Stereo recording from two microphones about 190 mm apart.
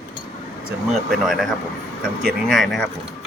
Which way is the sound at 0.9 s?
Centre (ahead or behind).